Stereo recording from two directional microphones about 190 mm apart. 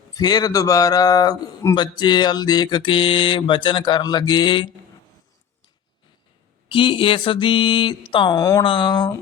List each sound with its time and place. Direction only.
0.2 s a man's voice: 20° left (ahead or behind)
6.7 s a man's voice: 25° left (ahead or behind)